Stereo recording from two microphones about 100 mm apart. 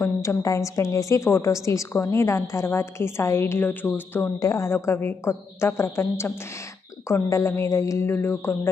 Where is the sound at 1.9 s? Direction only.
30° left (ahead or behind).